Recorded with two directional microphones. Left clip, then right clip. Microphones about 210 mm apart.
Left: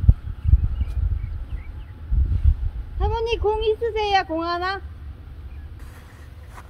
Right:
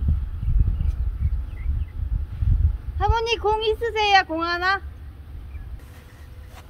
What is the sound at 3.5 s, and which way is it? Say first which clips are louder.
Speech: even; 25° right (ahead or behind).